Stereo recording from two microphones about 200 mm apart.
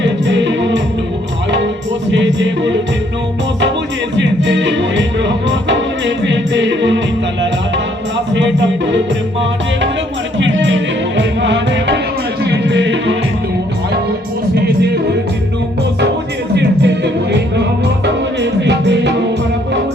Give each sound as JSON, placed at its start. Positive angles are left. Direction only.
{"t": 0.0, "sound": "music", "side_deg": -65}
{"t": 2.1, "sound": "music", "side_deg": -65}
{"t": 4.2, "sound": "music", "side_deg": -65}
{"t": 8.3, "sound": "music", "side_deg": -65}
{"t": 10.3, "sound": "music", "side_deg": -65}
{"t": 16.6, "sound": "music", "side_deg": -55}
{"t": 18.6, "sound": "music", "side_deg": -60}